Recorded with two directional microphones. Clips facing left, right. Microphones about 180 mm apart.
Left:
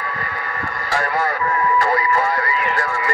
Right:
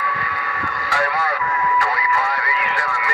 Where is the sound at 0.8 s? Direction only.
45° left (ahead or behind).